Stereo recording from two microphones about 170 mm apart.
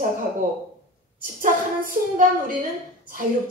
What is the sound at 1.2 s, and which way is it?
Speech, 55° right (ahead or behind).